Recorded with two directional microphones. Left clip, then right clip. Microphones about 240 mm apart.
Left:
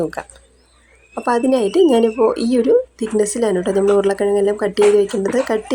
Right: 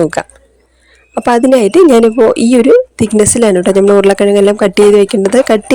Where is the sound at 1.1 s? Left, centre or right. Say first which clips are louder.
Right 8 dB; right.